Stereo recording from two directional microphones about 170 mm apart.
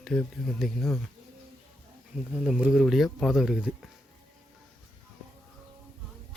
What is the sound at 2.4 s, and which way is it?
Speech, 5° right (ahead or behind).